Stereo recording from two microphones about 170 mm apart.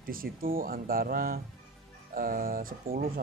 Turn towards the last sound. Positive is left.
turn(degrees=-60)  # may be behind; listen again after turning